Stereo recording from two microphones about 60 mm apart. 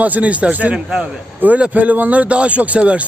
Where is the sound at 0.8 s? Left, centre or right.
Centre.